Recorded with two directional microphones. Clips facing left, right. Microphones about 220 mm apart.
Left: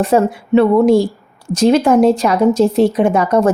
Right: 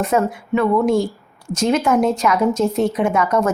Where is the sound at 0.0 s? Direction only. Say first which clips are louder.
Left 5 dB; 30° left (ahead or behind).